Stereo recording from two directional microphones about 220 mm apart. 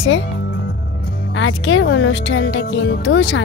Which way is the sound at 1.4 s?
60° left (ahead or behind).